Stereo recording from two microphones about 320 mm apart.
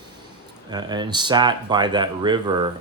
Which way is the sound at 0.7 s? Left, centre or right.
Centre.